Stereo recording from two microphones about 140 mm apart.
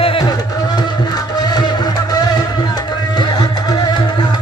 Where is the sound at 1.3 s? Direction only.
30° left (ahead or behind).